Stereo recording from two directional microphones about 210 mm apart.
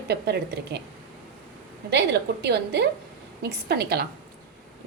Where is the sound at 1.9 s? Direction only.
55° right (ahead or behind).